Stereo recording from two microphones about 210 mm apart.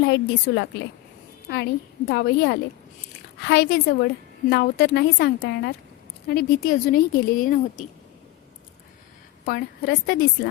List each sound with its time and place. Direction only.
0.1 s a woman's voice: 55° left (ahead or behind)
6.2 s a woman's voice: 45° left (ahead or behind)
9.5 s a woman's voice: 50° left (ahead or behind)